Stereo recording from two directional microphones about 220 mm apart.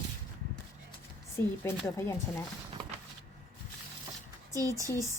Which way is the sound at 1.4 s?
10° left (ahead or behind).